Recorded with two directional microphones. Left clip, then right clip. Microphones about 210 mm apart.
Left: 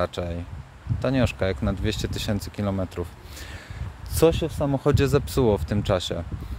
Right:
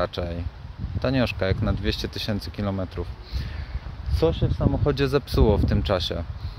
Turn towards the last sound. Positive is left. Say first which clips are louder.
# even
turn(degrees=5)  # may be behind; listen again after turning